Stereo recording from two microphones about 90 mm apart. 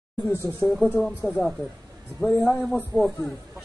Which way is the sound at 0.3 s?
25° left (ahead or behind).